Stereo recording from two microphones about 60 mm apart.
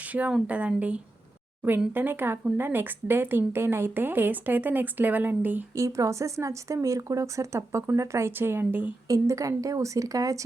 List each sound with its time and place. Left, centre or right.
0.0 s a sound: right
0.4 s speech: right
1.9 s speech: right
5.7 s a woman's voice: right
8.4 s speech: right
9.0 s a woman's voice: right